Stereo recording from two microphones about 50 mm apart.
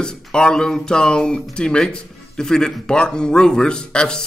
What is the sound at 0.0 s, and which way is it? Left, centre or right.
Speech, centre.